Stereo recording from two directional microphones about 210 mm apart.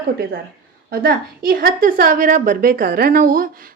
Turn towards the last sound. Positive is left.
turn(degrees=-40)  # may be behind; listen again after turning